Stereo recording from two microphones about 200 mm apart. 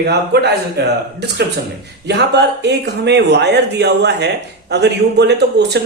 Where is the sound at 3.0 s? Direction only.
60° right (ahead or behind).